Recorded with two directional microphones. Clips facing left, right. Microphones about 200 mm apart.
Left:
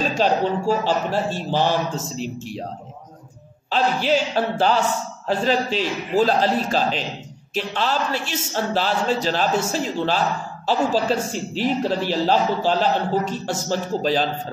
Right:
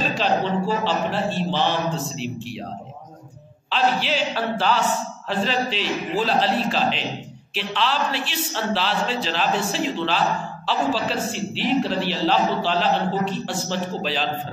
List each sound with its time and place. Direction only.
0.2 s a woman's voice: 45° left (ahead or behind)
3.7 s a woman's voice: 45° left (ahead or behind)